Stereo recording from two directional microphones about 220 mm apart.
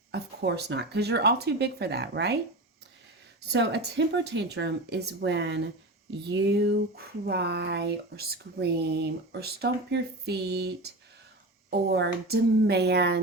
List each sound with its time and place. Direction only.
0.1 s speech: 50° right (ahead or behind)
3.5 s speech: 50° right (ahead or behind)